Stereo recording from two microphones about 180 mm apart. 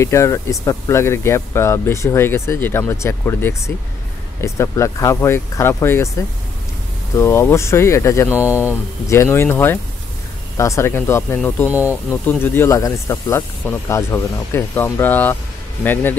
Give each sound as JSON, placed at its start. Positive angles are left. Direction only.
{"t": 0.0, "sound": "speech", "side_deg": 15}
{"t": 7.2, "sound": "speech", "side_deg": 15}